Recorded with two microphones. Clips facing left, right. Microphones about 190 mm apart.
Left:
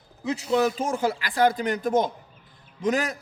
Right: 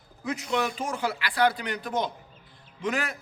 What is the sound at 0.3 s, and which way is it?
A man's voice, 30° left (ahead or behind).